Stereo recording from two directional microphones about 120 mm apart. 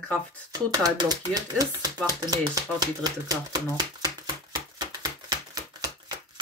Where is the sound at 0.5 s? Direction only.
30° right (ahead or behind).